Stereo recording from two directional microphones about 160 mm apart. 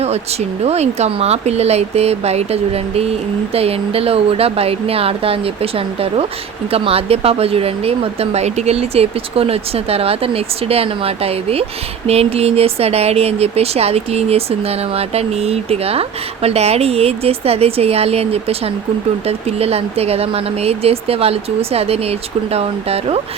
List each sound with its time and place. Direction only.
0.0 s speech: 40° right (ahead or behind)